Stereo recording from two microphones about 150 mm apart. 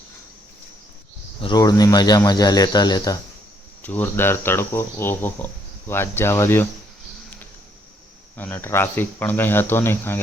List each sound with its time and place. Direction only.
1.4 s speech: 30° left (ahead or behind)
3.8 s speech: 15° left (ahead or behind)
8.4 s speech: 10° left (ahead or behind)